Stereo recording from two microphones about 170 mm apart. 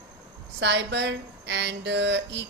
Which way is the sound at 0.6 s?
90° right.